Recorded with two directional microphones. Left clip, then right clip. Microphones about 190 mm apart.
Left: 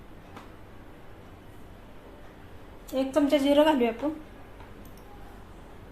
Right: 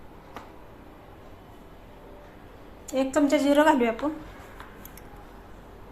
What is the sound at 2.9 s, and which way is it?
A woman's voice, 10° right (ahead or behind).